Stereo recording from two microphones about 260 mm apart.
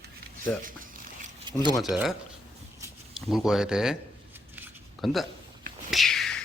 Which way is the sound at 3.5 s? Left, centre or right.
Centre.